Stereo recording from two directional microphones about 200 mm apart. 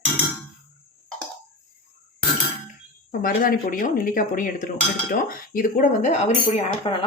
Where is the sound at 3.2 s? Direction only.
45° left (ahead or behind).